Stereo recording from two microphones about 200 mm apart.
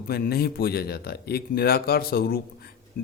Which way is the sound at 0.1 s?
50° left (ahead or behind).